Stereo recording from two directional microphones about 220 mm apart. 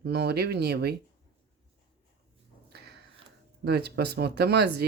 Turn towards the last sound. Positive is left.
turn(degrees=-50)  # may be behind; listen again after turning